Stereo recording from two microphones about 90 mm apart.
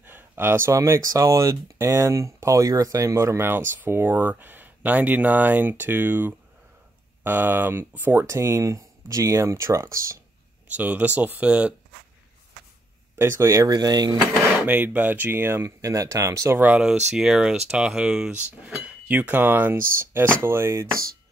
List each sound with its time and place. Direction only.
0.0 s speech: 25° right (ahead or behind)
8.3 s speech: 30° right (ahead or behind)
10.8 s speech: 15° right (ahead or behind)
13.2 s speech: 30° right (ahead or behind)
13.7 s speech: 50° right (ahead or behind)
14.7 s speech: 20° right (ahead or behind)
16.6 s speech: 10° right (ahead or behind); by 20.8 s 30° right (ahead or behind)